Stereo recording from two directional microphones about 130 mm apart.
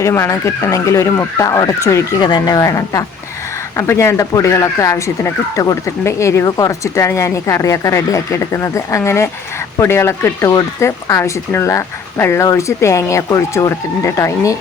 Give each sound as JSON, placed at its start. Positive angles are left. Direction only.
{"t": 0.0, "sound": "speech", "side_deg": 25}